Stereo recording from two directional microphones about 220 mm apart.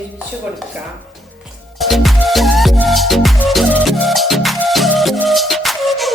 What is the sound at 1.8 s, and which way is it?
Music, centre (ahead or behind).